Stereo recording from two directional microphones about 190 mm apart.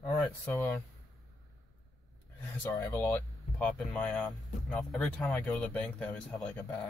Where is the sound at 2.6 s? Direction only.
10° left (ahead or behind).